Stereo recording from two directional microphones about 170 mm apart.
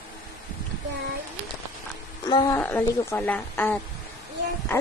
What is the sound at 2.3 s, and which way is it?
Speech, 25° left (ahead or behind).